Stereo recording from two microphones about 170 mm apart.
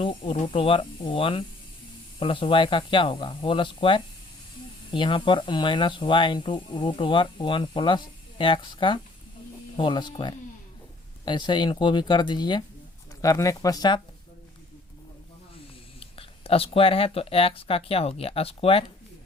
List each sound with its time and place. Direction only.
0.0 s speech: 30° left (ahead or behind)
16.0 s speech: 35° left (ahead or behind)